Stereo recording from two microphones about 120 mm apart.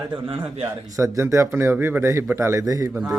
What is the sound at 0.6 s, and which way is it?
Speech, 25° right (ahead or behind).